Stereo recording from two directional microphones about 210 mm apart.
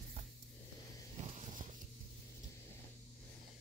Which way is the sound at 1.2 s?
35° right (ahead or behind).